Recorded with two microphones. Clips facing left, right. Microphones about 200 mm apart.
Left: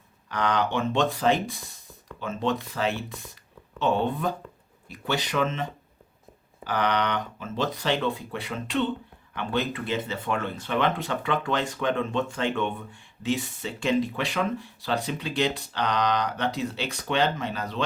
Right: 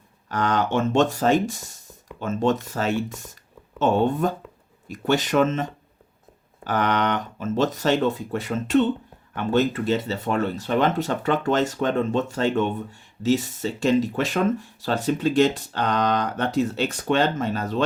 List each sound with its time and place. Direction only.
0.3 s speech: 45° right (ahead or behind)